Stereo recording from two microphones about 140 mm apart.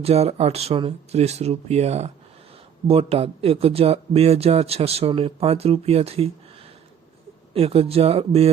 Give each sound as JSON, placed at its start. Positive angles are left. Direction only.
{"t": 0.0, "sound": "speech", "side_deg": -45}
{"t": 7.5, "sound": "speech", "side_deg": -45}